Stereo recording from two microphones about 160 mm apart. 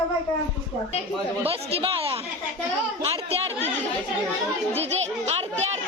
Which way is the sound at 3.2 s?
40° right (ahead or behind).